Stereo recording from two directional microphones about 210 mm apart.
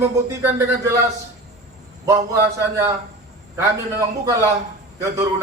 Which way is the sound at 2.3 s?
15° right (ahead or behind).